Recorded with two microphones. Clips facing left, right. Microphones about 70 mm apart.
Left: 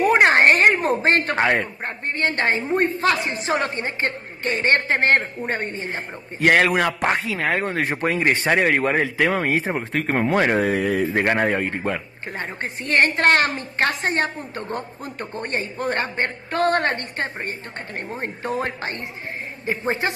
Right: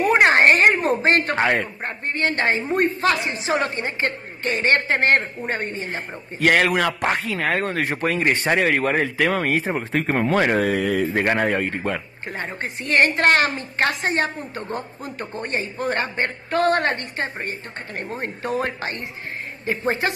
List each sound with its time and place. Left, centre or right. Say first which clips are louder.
0.0 s a sound: even; left
1.3 s speech: even; centre
2.0 s a woman's voice: even; left
3.3 s a man's voice: even; left
7.3 s speech: even; centre
7.6 s speech: even; left
9.0 s speech: even; centre
9.7 s speech: right 1 dB; centre
10.2 s speech: left 1 dB; centre
10.7 s speech: even; left
12.3 s a woman's voice: even; left
18.0 s a woman's voice: even; left
19.6 s a woman's voice: right 1 dB; left